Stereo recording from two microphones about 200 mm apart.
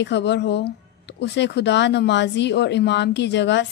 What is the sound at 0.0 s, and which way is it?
Speech, 60° left (ahead or behind).